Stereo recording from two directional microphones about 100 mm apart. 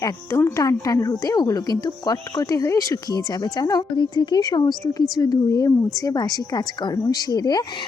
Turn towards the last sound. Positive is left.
turn(degrees=40)  # may be behind; listen again after turning